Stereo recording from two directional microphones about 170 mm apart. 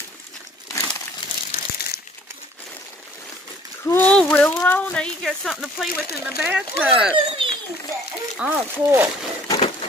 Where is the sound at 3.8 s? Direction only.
10° left (ahead or behind); by 7.1 s 5° right (ahead or behind).